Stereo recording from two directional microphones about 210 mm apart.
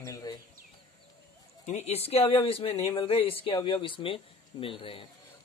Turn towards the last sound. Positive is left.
turn(degrees=25)  # may be behind; listen again after turning